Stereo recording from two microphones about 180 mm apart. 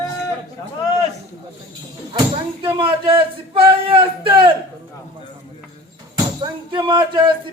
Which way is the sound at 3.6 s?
30° right (ahead or behind).